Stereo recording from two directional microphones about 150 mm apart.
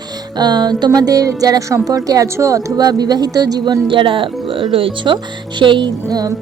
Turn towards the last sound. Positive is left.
turn(degrees=-30)  # may be behind; listen again after turning